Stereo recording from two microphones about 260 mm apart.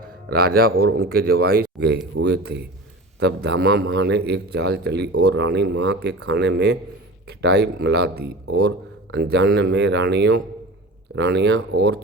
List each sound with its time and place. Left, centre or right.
0.3 s speech: right